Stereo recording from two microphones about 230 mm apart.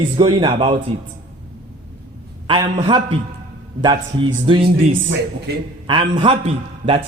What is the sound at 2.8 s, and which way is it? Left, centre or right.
Speech, right.